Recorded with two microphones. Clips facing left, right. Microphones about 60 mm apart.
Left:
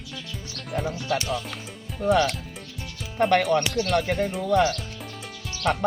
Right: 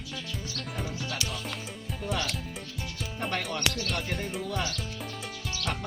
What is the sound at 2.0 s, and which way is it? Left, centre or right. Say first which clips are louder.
Speech: left 12 dB; left.